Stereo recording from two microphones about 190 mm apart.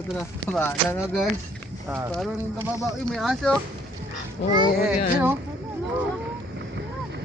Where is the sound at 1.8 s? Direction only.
15° right (ahead or behind).